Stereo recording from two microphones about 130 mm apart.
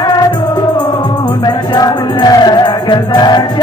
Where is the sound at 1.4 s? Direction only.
30° left (ahead or behind).